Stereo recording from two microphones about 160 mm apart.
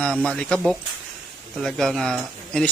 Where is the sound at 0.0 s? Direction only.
5° left (ahead or behind).